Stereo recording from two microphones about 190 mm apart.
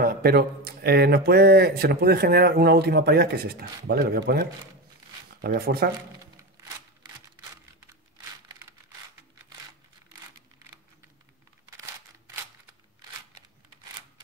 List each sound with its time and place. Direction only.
0.0 s speech: 50° right (ahead or behind)